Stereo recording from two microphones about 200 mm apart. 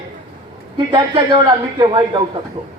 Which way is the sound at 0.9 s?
20° right (ahead or behind).